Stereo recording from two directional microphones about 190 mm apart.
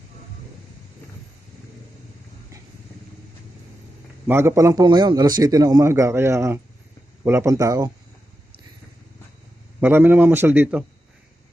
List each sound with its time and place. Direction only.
4.3 s a man's voice: 10° right (ahead or behind)
9.8 s a man's voice: 10° right (ahead or behind)